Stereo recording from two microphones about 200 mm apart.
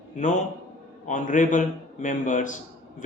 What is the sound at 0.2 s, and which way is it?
A man's voice, 40° left (ahead or behind).